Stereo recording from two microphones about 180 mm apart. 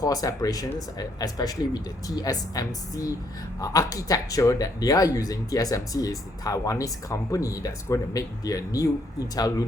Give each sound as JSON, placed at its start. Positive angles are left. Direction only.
{"t": 0.0, "sound": "speech", "side_deg": 20}